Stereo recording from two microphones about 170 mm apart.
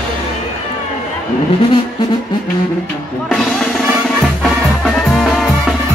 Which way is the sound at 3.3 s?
Centre (ahead or behind).